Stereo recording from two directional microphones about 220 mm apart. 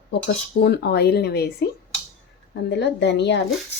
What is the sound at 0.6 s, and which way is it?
Speech, 50° left (ahead or behind).